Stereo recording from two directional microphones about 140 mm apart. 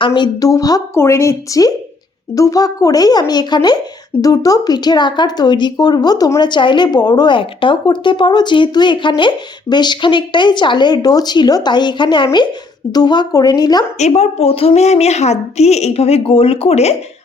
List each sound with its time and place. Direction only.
0.0 s a woman's voice: 30° left (ahead or behind)
14.0 s a woman's voice: 50° left (ahead or behind)